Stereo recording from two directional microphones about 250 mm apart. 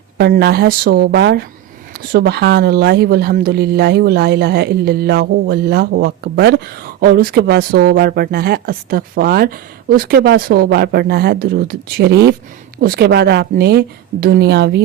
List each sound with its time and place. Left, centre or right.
0.2 s speech: right